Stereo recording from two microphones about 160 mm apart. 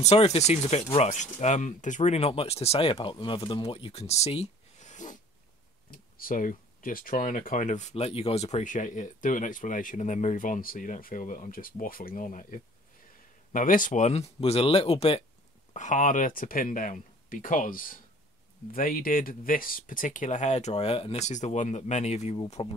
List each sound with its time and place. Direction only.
0.0 s speech: 40° left (ahead or behind)
5.9 s speech: 60° left (ahead or behind); by 15.2 s 40° left (ahead or behind)
15.7 s speech: 50° left (ahead or behind)